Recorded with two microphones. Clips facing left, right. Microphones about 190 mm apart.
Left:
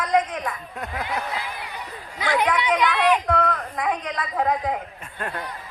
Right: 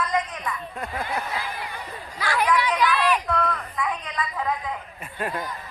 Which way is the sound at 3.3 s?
55° left (ahead or behind).